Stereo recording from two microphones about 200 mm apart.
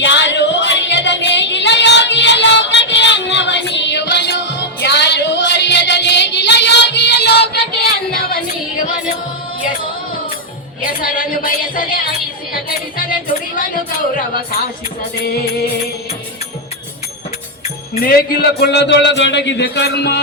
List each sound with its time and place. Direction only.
0.0 s music: 65° left (ahead or behind)
10.8 s music: 45° left (ahead or behind)
18.0 s speech: 50° left (ahead or behind)